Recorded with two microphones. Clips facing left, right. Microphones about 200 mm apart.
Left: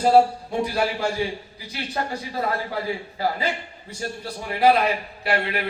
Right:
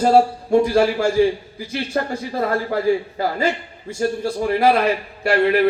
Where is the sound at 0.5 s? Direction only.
50° right (ahead or behind).